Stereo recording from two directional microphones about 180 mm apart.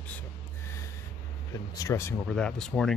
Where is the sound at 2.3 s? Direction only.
5° left (ahead or behind).